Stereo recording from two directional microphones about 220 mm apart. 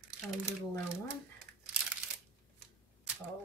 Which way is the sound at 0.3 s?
Centre (ahead or behind).